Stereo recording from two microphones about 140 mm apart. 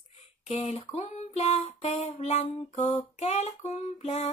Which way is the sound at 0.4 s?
50° left (ahead or behind).